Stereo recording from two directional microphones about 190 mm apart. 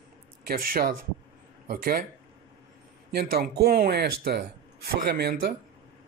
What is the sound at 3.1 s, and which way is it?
Speech, 55° right (ahead or behind).